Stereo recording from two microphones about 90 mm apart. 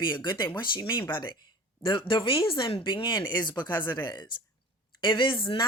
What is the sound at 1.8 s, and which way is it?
Speech, 75° left (ahead or behind).